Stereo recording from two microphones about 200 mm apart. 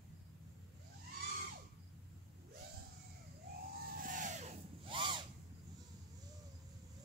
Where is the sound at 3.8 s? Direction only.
45° right (ahead or behind); by 5.2 s 25° right (ahead or behind).